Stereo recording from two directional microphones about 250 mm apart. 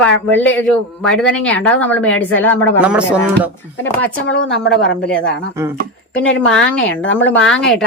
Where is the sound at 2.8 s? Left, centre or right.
Centre.